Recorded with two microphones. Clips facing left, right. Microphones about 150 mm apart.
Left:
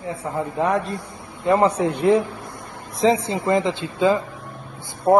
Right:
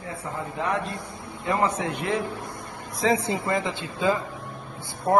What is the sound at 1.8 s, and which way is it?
Speech, 30° left (ahead or behind).